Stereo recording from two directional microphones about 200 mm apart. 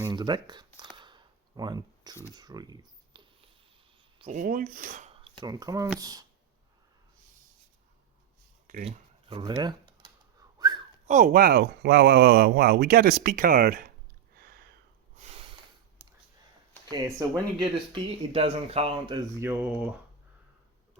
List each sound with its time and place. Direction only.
0.0 s speech: 20° right (ahead or behind)
0.8 s a sound: 20° right (ahead or behind)
4.2 s speech: 35° right (ahead or behind)
5.4 s speech: 20° right (ahead or behind)
8.8 s a sound: 30° right (ahead or behind)
9.4 s speech: 20° right (ahead or behind)
10.6 s whistling: 20° right (ahead or behind)
11.0 s speech: 40° right (ahead or behind)
14.3 s a sound: 50° right (ahead or behind)
15.1 s snort: 35° right (ahead or behind)
16.9 s speech: 20° right (ahead or behind)
19.4 s speech: 10° right (ahead or behind)